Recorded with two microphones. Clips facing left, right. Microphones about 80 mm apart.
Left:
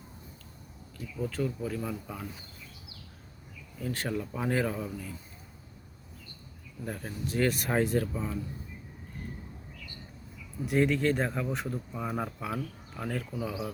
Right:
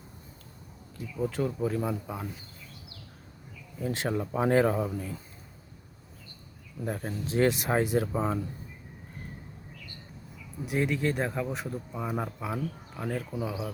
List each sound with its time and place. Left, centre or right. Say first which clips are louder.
1.2 s speech: right 3 dB; right
3.8 s speech: right 3 dB; right
6.8 s speech: right 3 dB; right; by 8.0 s centre
8.0 s speech: right 5 dB; right
10.7 s speech: left 2 dB; centre